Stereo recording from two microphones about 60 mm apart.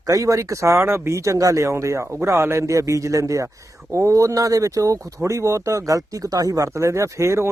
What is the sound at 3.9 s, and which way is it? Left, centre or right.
Speech, right.